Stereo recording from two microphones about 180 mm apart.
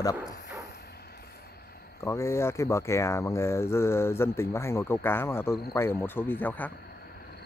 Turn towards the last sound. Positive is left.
turn(degrees=10)  # may be behind; listen again after turning